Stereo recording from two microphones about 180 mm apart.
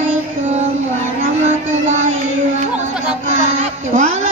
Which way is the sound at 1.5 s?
40° right (ahead or behind).